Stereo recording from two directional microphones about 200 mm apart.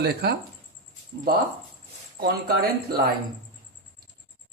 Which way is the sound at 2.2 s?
50° right (ahead or behind).